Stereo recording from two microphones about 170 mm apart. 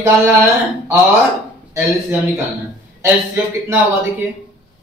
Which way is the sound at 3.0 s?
10° right (ahead or behind).